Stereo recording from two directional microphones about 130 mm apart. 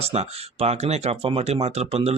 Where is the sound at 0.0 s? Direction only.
55° right (ahead or behind).